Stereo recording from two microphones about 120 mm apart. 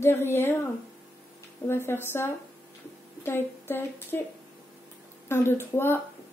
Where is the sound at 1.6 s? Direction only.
20° left (ahead or behind).